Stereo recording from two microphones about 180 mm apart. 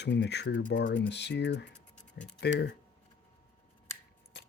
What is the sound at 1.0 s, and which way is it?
Speech, 75° left (ahead or behind).